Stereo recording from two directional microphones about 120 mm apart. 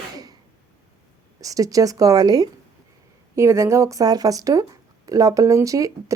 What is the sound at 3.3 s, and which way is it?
Speech, 25° right (ahead or behind).